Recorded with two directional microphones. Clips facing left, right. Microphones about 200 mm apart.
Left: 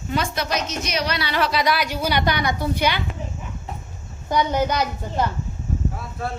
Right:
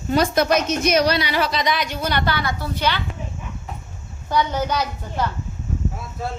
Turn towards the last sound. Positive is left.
turn(degrees=10)  # may be behind; listen again after turning